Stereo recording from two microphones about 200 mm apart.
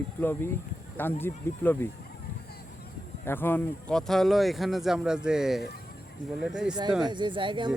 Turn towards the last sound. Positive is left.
turn(degrees=-25)  # may be behind; listen again after turning